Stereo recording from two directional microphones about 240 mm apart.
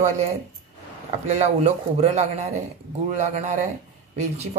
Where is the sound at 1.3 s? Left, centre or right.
Right.